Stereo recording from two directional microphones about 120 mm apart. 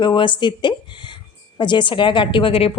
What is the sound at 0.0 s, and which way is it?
A woman's voice, 40° left (ahead or behind).